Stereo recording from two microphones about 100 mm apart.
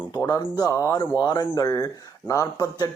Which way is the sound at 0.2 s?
40° left (ahead or behind).